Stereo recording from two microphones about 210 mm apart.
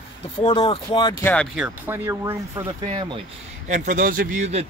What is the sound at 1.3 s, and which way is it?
Speech, 5° left (ahead or behind).